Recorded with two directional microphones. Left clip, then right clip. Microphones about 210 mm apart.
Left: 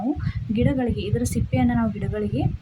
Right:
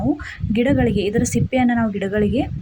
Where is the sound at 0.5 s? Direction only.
15° right (ahead or behind).